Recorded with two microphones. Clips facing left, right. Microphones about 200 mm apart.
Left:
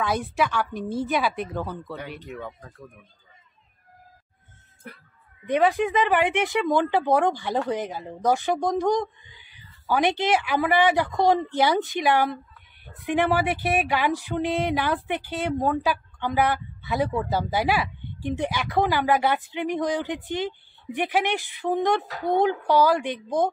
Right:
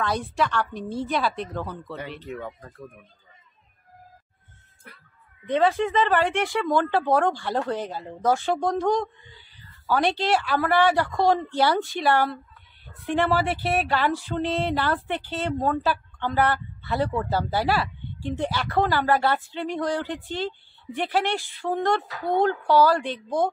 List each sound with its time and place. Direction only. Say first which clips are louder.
0.0 s speech: left 1 dB; 5° left (ahead or behind)
5.5 s speech: even; 15° left (ahead or behind)